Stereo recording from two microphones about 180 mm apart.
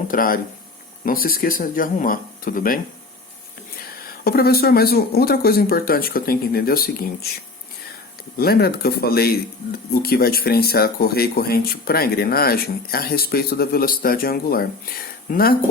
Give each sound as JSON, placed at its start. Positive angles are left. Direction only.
{"t": 0.1, "sound": "speech", "side_deg": 50}
{"t": 3.8, "sound": "speech", "side_deg": 55}
{"t": 8.4, "sound": "speech", "side_deg": 60}